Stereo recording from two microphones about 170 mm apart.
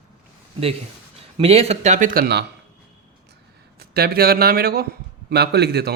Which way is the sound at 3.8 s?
65° right (ahead or behind).